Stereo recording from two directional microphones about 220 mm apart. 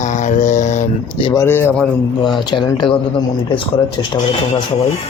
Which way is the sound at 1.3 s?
10° left (ahead or behind).